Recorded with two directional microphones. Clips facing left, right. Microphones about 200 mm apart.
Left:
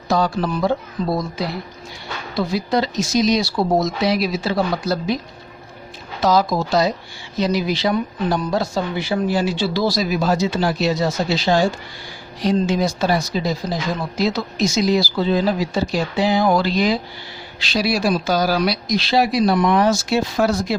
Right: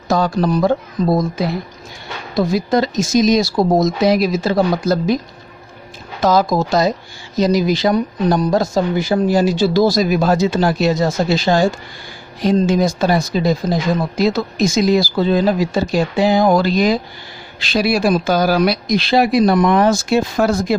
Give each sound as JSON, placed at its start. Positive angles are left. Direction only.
{"t": 0.1, "sound": "speech", "side_deg": -45}
{"t": 6.2, "sound": "speech", "side_deg": -50}